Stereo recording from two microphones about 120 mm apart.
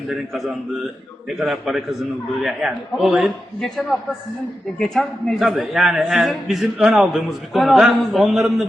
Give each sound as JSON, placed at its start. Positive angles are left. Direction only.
{"t": 0.1, "sound": "a man's voice", "side_deg": -5}